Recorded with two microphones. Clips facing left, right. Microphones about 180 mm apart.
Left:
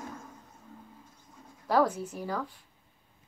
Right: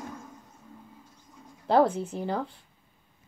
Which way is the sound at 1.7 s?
25° right (ahead or behind).